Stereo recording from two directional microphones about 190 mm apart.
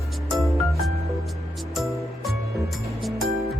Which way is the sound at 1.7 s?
Centre (ahead or behind).